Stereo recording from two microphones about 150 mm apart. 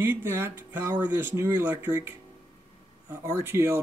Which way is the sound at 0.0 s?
15° right (ahead or behind).